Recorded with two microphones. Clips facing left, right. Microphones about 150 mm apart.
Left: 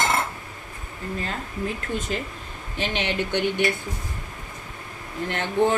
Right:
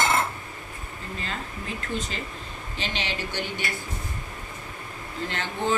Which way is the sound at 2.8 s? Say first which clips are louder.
Left 6 dB; 55° left (ahead or behind).